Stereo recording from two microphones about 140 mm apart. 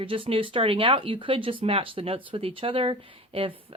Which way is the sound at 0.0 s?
40° right (ahead or behind).